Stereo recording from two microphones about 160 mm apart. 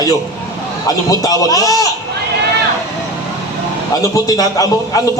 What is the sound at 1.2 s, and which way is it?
Speech, 20° left (ahead or behind).